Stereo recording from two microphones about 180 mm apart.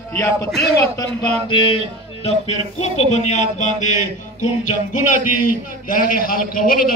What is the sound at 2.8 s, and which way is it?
A man's voice, 40° left (ahead or behind).